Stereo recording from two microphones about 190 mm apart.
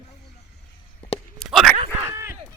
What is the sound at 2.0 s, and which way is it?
Clip-clop, 15° right (ahead or behind).